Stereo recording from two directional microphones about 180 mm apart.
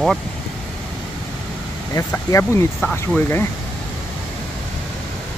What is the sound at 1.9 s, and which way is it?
Speech, 15° left (ahead or behind).